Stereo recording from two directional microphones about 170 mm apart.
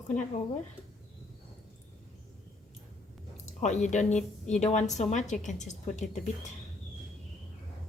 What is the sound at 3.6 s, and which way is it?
A woman's voice, 45° left (ahead or behind).